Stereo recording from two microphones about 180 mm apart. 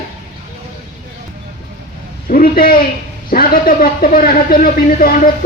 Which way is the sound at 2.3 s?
55° left (ahead or behind).